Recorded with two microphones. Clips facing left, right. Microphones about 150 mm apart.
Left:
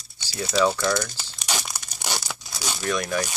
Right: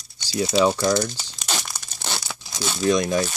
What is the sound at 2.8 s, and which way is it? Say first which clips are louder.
Speech: right 6 dB; 20° right (ahead or behind).